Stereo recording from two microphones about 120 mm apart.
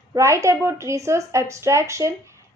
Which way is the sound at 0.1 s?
25° right (ahead or behind).